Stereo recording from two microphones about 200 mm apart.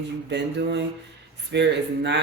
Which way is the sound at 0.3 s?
60° right (ahead or behind).